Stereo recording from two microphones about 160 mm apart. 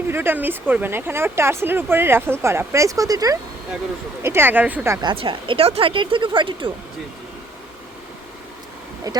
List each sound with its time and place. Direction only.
0.1 s speech: 15° right (ahead or behind)
5.0 s speech: 30° right (ahead or behind)